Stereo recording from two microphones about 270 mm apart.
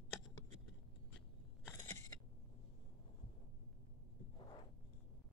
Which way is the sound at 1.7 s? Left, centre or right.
Centre.